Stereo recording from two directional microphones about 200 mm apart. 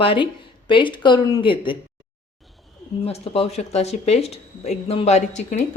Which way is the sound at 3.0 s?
30° left (ahead or behind).